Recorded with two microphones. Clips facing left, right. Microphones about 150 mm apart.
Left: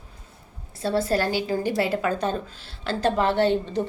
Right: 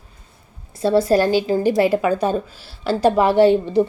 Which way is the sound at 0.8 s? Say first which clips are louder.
Right 8 dB; 15° right (ahead or behind).